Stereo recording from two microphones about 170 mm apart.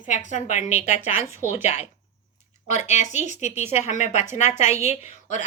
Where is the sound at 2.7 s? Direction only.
45° left (ahead or behind).